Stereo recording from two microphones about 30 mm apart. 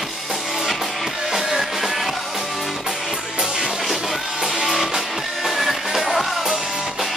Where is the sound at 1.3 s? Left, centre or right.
Centre.